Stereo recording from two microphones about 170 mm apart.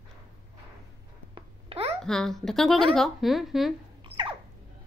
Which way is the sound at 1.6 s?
35° right (ahead or behind).